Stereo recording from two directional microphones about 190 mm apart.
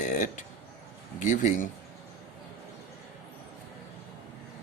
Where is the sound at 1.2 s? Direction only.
40° left (ahead or behind).